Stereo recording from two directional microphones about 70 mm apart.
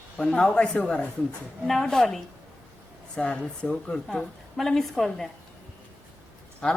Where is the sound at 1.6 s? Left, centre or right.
Centre.